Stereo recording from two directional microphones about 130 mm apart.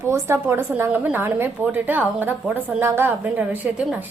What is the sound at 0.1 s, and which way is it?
A woman's voice, 20° right (ahead or behind).